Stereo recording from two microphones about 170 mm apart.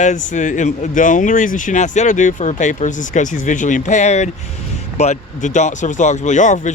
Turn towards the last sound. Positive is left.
turn(degrees=45)  # may be behind; listen again after turning